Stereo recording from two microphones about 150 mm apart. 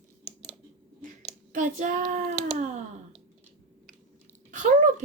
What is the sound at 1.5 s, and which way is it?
Child singing, 60° right (ahead or behind).